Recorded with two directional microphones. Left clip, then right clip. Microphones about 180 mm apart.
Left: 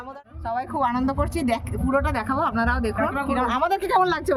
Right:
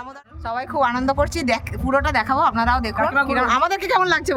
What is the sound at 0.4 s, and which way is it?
Speech, 15° right (ahead or behind).